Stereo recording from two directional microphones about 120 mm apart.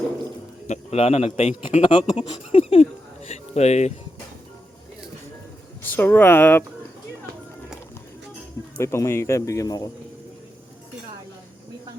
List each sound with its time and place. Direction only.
0.7 s a man's voice: 60° left (ahead or behind)
1.8 s speech: 45° left (ahead or behind)
3.2 s a sound: 65° left (ahead or behind)
5.8 s speech: 15° left (ahead or behind)
8.8 s speech: 20° left (ahead or behind)